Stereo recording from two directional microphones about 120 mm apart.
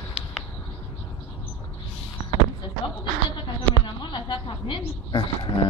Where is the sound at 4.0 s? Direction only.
40° left (ahead or behind).